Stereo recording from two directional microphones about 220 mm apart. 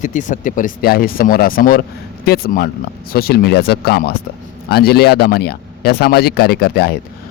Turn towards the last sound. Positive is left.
turn(degrees=45)  # may be behind; listen again after turning